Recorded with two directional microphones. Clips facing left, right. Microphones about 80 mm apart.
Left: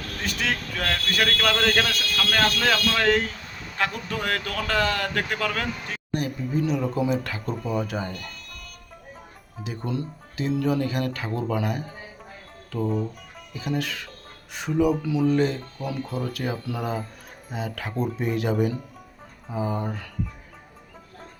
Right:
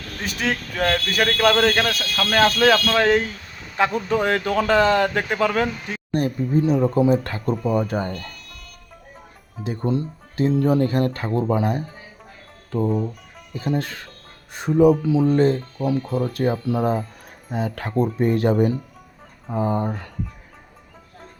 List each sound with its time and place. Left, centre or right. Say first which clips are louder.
0.3 s speech: right 6 dB; centre
6.1 s speech: right 6 dB; right
9.8 s speech: right 7 dB; right
13.5 s speech: right 4 dB; right
15.3 s speech: right 5 dB; right
17.5 s speech: right 6 dB; right
19.8 s speech: right 5 dB; right